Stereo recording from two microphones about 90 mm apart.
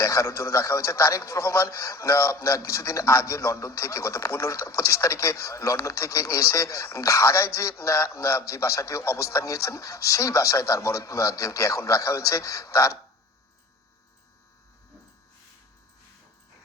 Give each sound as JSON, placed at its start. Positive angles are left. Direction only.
{"t": 0.0, "sound": "a man's voice", "side_deg": 35}